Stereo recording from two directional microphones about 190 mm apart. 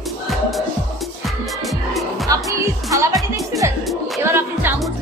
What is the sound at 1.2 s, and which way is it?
Music, centre (ahead or behind).